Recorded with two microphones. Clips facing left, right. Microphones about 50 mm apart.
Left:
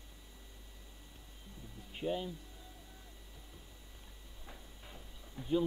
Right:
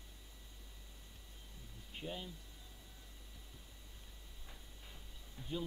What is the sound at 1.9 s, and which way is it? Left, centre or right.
Speech, centre.